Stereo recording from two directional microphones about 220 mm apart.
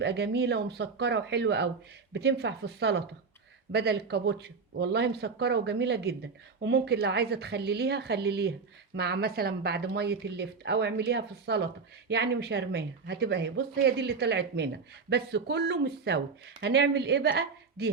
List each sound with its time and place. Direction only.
0.0 s speech: 50° right (ahead or behind)